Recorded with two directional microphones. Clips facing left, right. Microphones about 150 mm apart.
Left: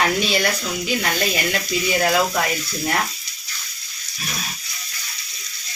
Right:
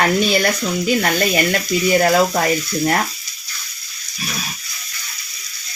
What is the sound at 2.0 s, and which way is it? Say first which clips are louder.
Speech: right 4 dB; 40° right (ahead or behind).